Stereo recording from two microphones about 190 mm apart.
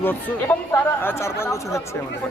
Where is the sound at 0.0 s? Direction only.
10° left (ahead or behind).